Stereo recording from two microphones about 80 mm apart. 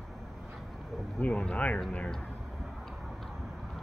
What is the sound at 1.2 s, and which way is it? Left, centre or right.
Speech, centre.